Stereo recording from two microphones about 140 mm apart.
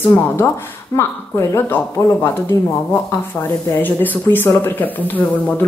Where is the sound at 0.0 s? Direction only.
15° left (ahead or behind).